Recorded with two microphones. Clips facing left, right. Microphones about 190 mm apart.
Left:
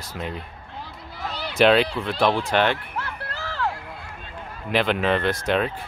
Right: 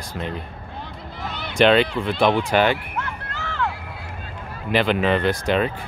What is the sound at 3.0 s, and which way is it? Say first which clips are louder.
Crowd: right 2 dB; 35° left (ahead or behind).